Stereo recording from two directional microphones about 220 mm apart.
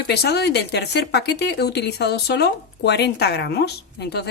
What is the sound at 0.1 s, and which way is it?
Speech, 50° left (ahead or behind).